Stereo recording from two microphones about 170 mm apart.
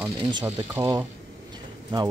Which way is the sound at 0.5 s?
15° right (ahead or behind).